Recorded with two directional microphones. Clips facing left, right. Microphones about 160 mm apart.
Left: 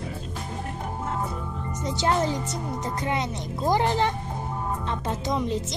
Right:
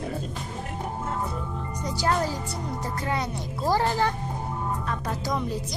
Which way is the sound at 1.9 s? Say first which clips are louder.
Left 2 dB; 20° left (ahead or behind).